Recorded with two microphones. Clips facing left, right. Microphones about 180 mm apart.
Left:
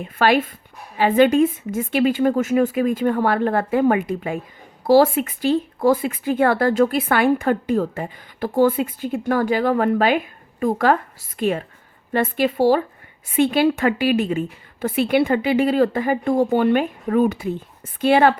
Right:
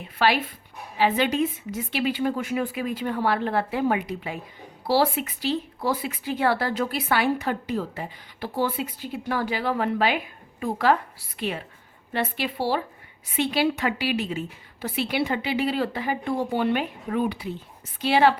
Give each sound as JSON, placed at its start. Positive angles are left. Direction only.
{"t": 0.0, "sound": "speech", "side_deg": 50}